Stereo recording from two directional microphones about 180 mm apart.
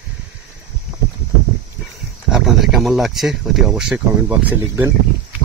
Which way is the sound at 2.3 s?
Centre (ahead or behind).